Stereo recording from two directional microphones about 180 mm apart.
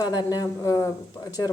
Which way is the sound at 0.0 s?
20° left (ahead or behind).